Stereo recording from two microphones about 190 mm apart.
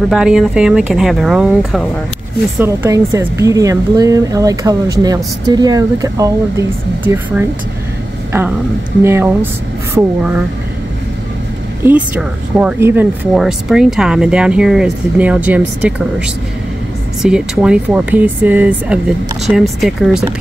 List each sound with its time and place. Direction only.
0.1 s speech: 5° right (ahead or behind)
2.6 s speech: 15° right (ahead or behind)
8.3 s a sound: 10° right (ahead or behind)
9.0 s speech: 10° right (ahead or behind)
11.8 s speech: 10° right (ahead or behind)
17.2 s speech: 5° right (ahead or behind)